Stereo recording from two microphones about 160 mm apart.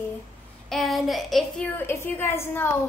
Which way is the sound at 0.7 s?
Centre (ahead or behind).